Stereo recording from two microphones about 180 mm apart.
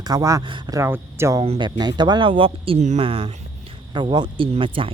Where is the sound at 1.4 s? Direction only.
30° right (ahead or behind).